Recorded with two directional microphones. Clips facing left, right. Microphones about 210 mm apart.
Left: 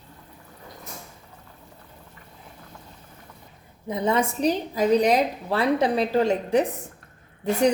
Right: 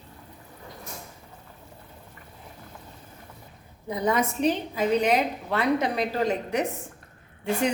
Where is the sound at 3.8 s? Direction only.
25° left (ahead or behind).